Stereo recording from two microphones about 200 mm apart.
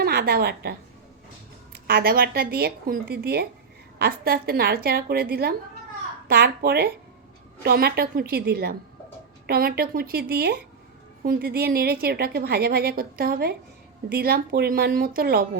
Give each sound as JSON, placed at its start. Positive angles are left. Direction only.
{"t": 0.0, "sound": "a woman's voice", "side_deg": -50}